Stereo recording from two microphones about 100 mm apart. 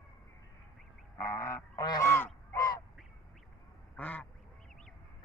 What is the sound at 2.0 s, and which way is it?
Goose, 20° left (ahead or behind).